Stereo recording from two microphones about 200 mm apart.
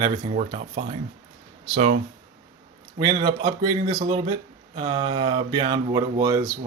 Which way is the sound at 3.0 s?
25° right (ahead or behind).